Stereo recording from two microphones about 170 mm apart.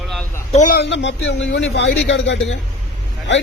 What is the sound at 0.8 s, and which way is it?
A man's voice, 90° left.